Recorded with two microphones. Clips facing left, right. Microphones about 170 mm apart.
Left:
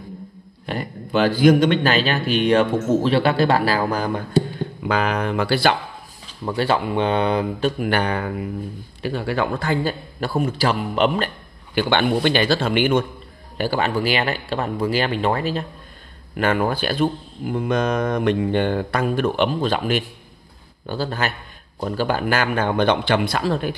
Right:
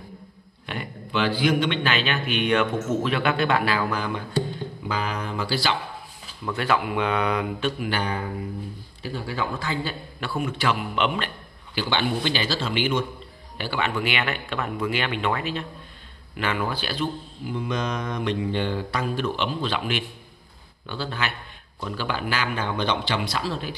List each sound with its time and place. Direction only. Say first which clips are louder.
0.7 s a man's voice: left 6 dB; 40° left (ahead or behind)
4.8 s speech: left 8 dB; 65° left (ahead or behind)
6.4 s a man's voice: left 4 dB; 30° left (ahead or behind)
7.8 s a man's voice: left 6 dB; 60° left (ahead or behind)
13.6 s a man's voice: left 6 dB; 40° left (ahead or behind)
16.3 s a man's voice: left 7 dB; 45° left (ahead or behind)